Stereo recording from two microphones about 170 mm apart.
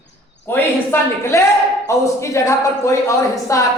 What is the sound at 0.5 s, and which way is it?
A woman's voice, 15° left (ahead or behind).